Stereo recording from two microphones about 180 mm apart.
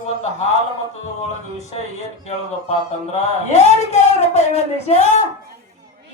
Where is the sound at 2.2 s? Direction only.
40° left (ahead or behind).